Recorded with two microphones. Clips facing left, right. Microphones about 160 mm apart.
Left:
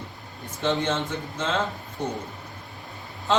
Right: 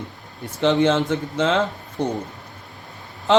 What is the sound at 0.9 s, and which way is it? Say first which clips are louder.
Speech: right 8 dB; 80° right.